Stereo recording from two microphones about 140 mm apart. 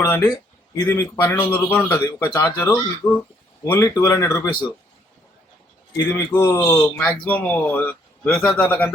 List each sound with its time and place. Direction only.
0.0 s a man's voice: 25° left (ahead or behind)
6.1 s a man's voice: 20° left (ahead or behind)